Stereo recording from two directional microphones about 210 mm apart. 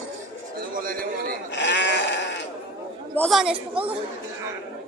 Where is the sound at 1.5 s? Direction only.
60° left (ahead or behind).